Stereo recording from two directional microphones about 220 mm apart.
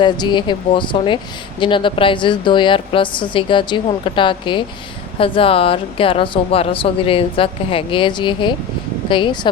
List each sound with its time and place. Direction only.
0.0 s speech: 20° left (ahead or behind)